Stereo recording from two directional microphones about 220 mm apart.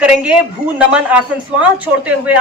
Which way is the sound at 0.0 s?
5° right (ahead or behind).